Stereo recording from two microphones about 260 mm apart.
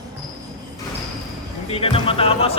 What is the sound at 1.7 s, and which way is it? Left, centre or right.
Speech, left.